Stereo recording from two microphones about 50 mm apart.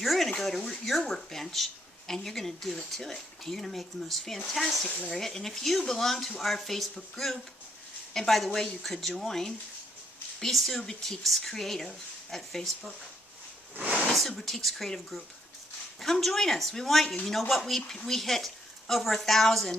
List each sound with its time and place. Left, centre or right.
0.0 s a sound: centre
0.3 s speech: centre
10.8 s speech: centre
13.7 s a sound: right
14.1 s speech: centre
17.7 s speech: centre